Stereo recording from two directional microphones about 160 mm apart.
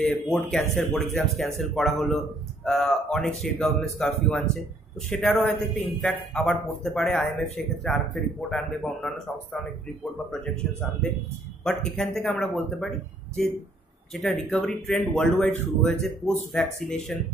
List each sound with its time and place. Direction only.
0.0 s speech: 5° left (ahead or behind)
14.1 s speech: centre (ahead or behind)